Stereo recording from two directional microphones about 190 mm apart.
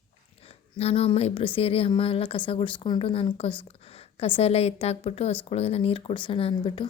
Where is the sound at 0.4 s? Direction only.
30° left (ahead or behind).